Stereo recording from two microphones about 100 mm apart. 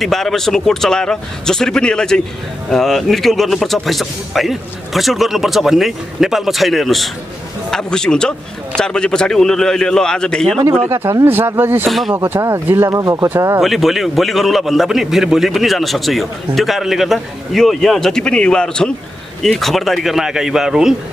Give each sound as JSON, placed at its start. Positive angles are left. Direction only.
{"t": 0.0, "sound": "a man's voice", "side_deg": 0}
{"t": 10.7, "sound": "speech", "side_deg": -20}
{"t": 13.6, "sound": "a man's voice", "side_deg": 0}